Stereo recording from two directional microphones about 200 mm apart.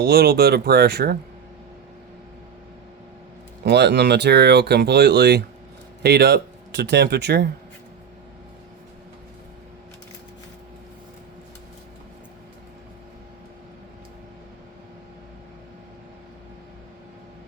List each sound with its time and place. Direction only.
0.0 s speech: 50° right (ahead or behind)
3.6 s speech: 55° right (ahead or behind)